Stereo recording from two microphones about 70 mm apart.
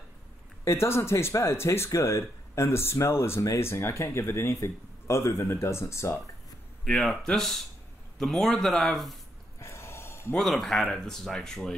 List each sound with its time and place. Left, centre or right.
0.7 s speech: left
6.8 s speech: centre
9.6 s gasp: left
10.3 s speech: centre